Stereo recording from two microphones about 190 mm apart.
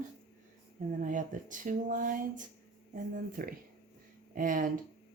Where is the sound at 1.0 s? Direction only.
45° right (ahead or behind).